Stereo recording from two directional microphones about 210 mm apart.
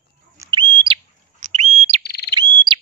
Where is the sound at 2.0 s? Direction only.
50° left (ahead or behind).